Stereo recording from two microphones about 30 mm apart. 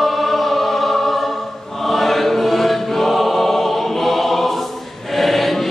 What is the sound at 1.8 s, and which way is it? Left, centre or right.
Choir, centre.